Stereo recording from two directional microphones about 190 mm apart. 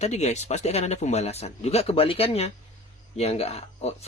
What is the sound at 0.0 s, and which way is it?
Speech, 35° left (ahead or behind).